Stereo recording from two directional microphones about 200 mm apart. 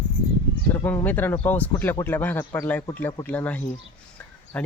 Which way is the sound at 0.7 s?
10° left (ahead or behind).